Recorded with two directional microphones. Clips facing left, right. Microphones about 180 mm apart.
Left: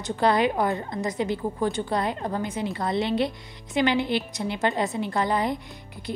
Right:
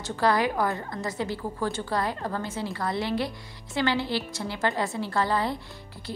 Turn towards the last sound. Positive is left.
turn(degrees=15)  # may be behind; listen again after turning